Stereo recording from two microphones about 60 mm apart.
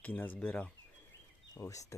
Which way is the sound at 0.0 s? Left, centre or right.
Left.